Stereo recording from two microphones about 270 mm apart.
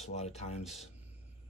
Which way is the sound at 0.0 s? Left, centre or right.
Left.